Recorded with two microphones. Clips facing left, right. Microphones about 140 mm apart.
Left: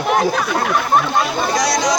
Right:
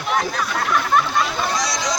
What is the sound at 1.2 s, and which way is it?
Speech, 70° left (ahead or behind).